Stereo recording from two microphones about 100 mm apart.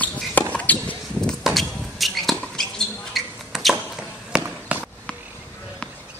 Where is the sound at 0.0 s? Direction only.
15° left (ahead or behind).